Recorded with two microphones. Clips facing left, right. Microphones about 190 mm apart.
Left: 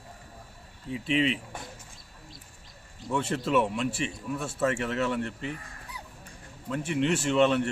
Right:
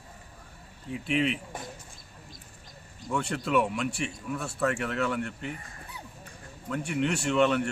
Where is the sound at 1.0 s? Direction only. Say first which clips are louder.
Left 1 dB; centre (ahead or behind).